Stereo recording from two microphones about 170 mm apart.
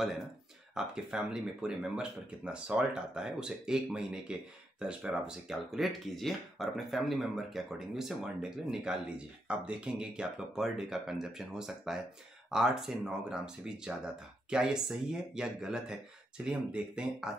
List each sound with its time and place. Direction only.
0.7 s speech: 5° right (ahead or behind)